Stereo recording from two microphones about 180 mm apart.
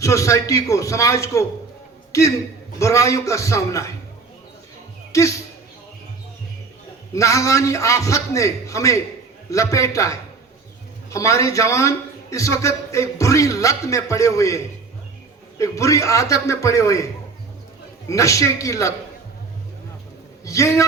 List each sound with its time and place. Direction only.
0.0 s a man's voice: 15° left (ahead or behind)
5.1 s a man's voice: 15° left (ahead or behind)
7.1 s a man's voice: 15° left (ahead or behind)
18.1 s a man's voice: 15° left (ahead or behind)
20.4 s a man's voice: 15° left (ahead or behind)